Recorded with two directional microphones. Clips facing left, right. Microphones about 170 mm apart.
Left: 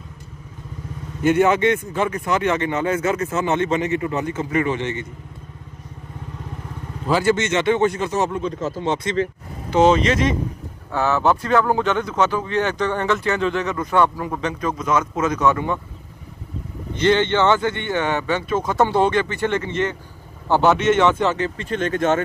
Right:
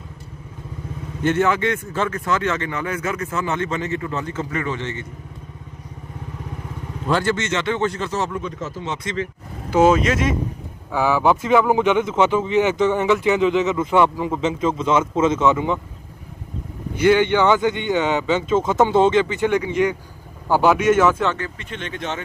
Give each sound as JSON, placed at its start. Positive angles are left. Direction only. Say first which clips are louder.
{"t": 1.2, "sound": "speech", "louder": "left 3 dB", "side_deg": 15}
{"t": 7.1, "sound": "speech", "louder": "left 2 dB", "side_deg": 5}
{"t": 7.3, "sound": "speech", "louder": "left 4 dB", "side_deg": 20}
{"t": 8.4, "sound": "speech", "louder": "left 4 dB", "side_deg": 30}
{"t": 9.7, "sound": "speech", "louder": "even", "side_deg": -5}
{"t": 16.9, "sound": "speech", "louder": "right 2 dB", "side_deg": -10}
{"t": 21.5, "sound": "speech", "louder": "left 9 dB", "side_deg": 40}